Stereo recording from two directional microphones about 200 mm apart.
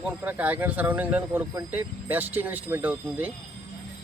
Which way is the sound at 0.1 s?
10° right (ahead or behind).